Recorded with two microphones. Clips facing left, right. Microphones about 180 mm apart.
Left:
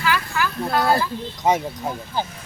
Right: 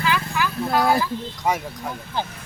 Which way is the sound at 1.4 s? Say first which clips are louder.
Left 5 dB; 20° left (ahead or behind).